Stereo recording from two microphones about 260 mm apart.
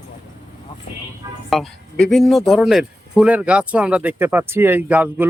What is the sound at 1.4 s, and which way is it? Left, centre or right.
A man's voice, centre.